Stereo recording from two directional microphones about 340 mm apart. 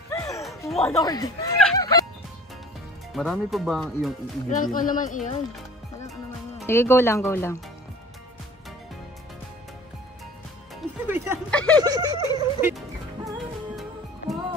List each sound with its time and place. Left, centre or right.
0.1 s turkey: centre
3.1 s speech: centre
4.5 s speech: left
6.6 s speech: centre
10.8 s music: centre
11.5 s speech: centre
11.8 s a sound: centre
12.6 s music: centre